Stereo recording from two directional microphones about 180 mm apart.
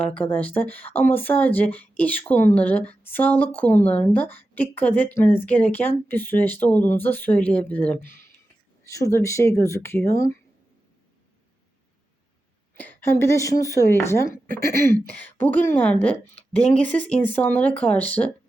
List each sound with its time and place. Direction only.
0.0 s speech: 5° left (ahead or behind)
12.8 s speech: 10° left (ahead or behind)